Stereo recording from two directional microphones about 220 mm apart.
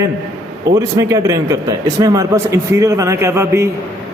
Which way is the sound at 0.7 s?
15° right (ahead or behind).